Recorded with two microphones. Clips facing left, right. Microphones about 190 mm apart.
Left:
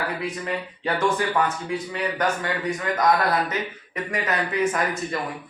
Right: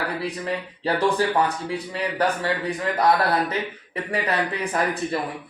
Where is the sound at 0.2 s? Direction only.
35° right (ahead or behind).